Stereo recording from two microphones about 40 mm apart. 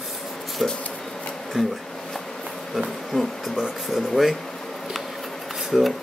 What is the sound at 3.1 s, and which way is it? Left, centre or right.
Speech, centre.